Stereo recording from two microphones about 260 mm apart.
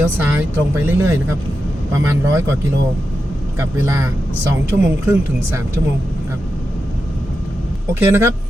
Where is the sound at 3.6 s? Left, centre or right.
Centre.